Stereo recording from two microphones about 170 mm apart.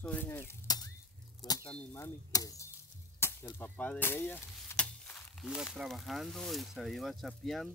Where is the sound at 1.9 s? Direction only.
20° left (ahead or behind).